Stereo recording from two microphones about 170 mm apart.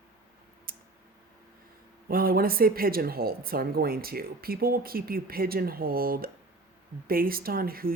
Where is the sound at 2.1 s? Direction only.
60° right (ahead or behind).